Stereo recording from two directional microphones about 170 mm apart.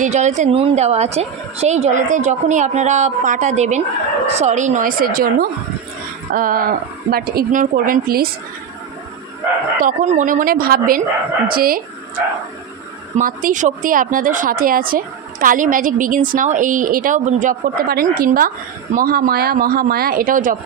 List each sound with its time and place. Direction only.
0.0 s a woman's voice: 45° right (ahead or behind); by 8.3 s 60° right (ahead or behind)
9.8 s a woman's voice: 45° right (ahead or behind)
13.1 s a woman's voice: 50° right (ahead or behind)